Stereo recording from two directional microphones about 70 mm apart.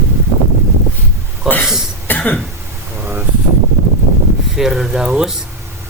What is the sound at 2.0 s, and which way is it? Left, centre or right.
Cough, left.